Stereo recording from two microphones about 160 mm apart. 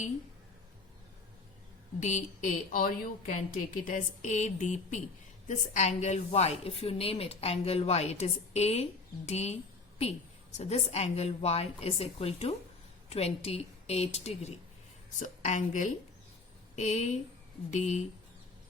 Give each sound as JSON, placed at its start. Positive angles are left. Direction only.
{"t": 2.0, "sound": "a woman's voice", "side_deg": 50}
{"t": 10.6, "sound": "a woman's voice", "side_deg": 40}